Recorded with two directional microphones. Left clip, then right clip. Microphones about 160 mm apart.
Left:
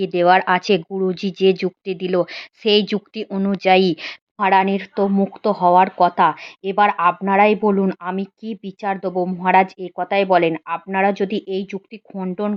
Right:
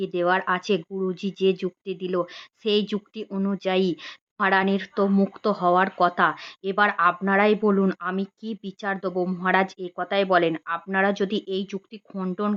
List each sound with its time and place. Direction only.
0.0 s speech: 20° left (ahead or behind)